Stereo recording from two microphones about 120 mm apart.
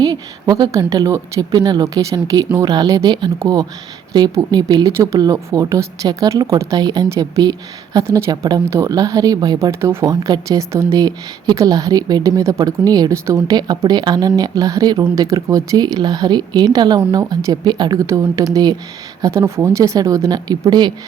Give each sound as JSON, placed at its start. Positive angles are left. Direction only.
{"t": 0.0, "sound": "speech", "side_deg": -30}